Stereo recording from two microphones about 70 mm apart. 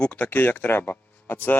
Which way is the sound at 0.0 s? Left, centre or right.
Centre.